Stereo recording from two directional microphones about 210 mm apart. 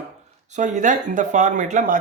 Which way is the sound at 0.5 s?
35° right (ahead or behind).